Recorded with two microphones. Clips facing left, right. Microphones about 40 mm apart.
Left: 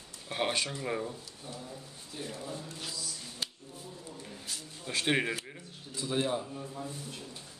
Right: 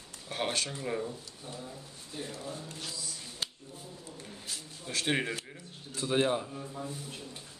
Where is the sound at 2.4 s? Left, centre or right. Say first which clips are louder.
Even; centre.